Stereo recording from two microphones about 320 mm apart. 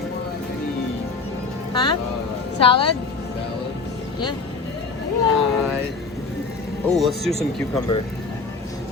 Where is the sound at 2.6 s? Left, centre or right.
Centre.